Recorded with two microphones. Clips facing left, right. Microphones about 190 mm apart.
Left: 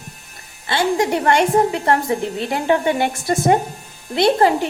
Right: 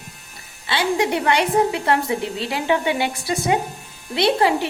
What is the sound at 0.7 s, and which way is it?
A woman's voice, 45° left (ahead or behind).